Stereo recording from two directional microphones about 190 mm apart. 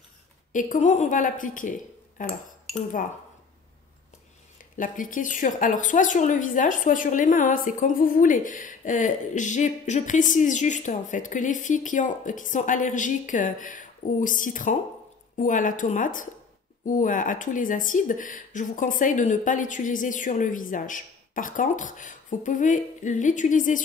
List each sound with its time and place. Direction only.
0.5 s a woman's voice: 40° left (ahead or behind)
4.7 s a woman's voice: 45° left (ahead or behind)